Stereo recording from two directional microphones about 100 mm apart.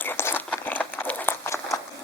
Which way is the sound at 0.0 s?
20° left (ahead or behind).